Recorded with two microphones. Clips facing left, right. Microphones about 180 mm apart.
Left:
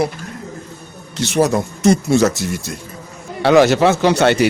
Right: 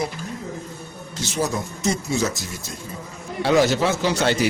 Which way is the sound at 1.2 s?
70° left (ahead or behind).